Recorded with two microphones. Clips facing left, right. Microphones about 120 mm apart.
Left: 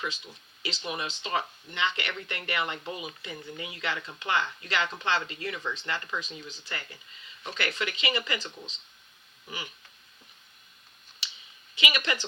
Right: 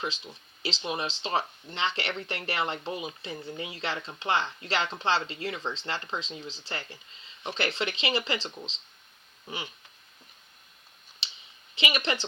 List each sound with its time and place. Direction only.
0.6 s speech: 25° right (ahead or behind)
11.7 s speech: 25° right (ahead or behind)